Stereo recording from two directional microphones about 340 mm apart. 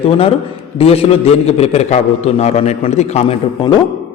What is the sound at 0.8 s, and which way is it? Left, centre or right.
A man's voice, centre.